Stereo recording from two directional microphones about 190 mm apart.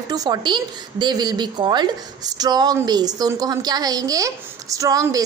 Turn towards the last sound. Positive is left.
turn(degrees=-20)  # may be behind; listen again after turning